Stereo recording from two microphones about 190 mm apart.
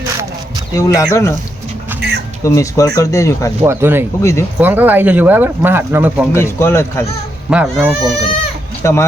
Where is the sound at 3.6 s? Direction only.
10° right (ahead or behind).